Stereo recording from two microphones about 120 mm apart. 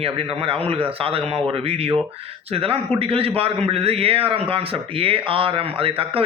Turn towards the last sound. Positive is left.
turn(degrees=-50)  # may be behind; listen again after turning